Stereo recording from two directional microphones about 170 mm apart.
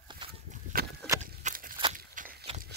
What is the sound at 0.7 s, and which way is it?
Rowboat, 55° right (ahead or behind).